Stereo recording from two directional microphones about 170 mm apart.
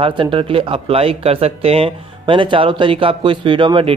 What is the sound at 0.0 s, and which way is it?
Speech, 30° right (ahead or behind).